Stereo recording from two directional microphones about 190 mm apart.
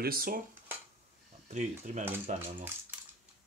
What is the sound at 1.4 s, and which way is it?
Speech, 40° right (ahead or behind).